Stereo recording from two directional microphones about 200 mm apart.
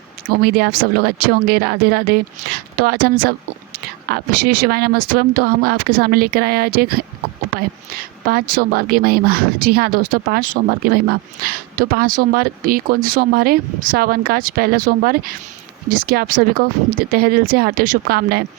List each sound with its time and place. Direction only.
0.4 s a woman's voice: 50° right (ahead or behind)